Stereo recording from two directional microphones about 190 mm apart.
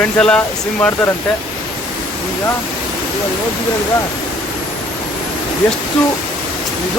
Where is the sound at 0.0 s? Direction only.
5° left (ahead or behind).